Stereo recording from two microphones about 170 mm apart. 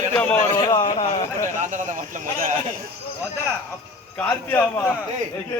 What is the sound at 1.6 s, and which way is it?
Speech, 50° right (ahead or behind).